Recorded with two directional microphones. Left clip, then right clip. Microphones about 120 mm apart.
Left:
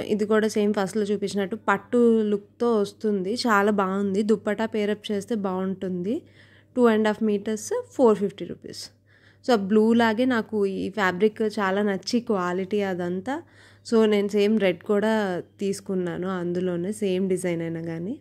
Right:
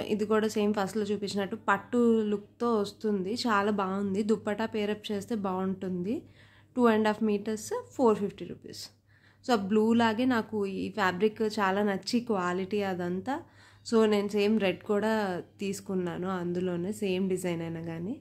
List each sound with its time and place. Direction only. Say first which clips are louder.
0.0 s a woman's voice: left 5 dB; 40° left (ahead or behind)